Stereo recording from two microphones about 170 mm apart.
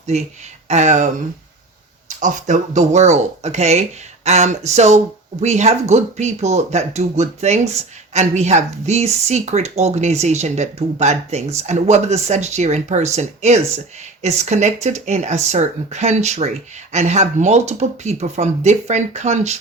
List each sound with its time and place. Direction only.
0.1 s speech: 40° right (ahead or behind)